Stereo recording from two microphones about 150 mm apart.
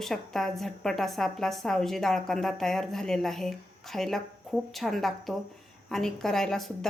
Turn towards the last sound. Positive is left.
turn(degrees=5)  # may be behind; listen again after turning